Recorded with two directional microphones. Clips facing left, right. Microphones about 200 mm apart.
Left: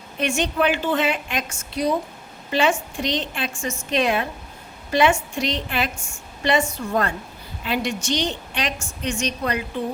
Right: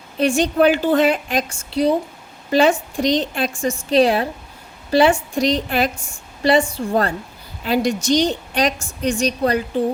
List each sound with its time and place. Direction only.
0.2 s a woman's voice: 35° right (ahead or behind)